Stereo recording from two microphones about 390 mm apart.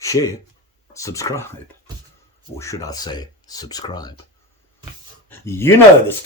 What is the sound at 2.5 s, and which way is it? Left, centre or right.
Speech, centre.